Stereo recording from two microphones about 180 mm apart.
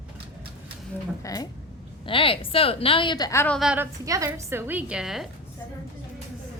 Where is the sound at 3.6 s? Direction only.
5° right (ahead or behind).